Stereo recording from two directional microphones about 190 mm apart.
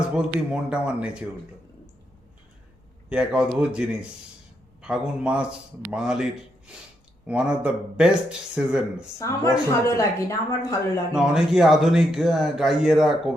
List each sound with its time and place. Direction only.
0.1 s speech: 5° right (ahead or behind)
3.1 s speech: 5° right (ahead or behind)
7.3 s speech: 5° right (ahead or behind)
9.1 s speech: 15° left (ahead or behind)
11.1 s speech: 5° right (ahead or behind)